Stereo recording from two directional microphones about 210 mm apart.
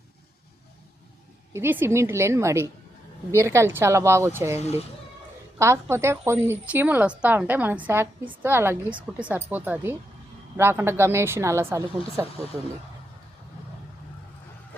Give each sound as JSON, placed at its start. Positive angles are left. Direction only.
{"t": 1.5, "sound": "speech", "side_deg": -10}